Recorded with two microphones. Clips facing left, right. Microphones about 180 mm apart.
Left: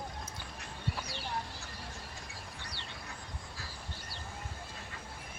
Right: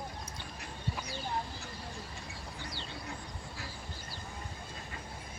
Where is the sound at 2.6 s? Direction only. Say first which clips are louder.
Right 4 dB; 70° left (ahead or behind).